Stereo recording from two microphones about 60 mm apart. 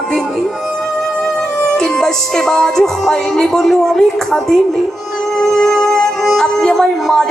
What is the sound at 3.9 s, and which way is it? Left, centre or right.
Speech, centre.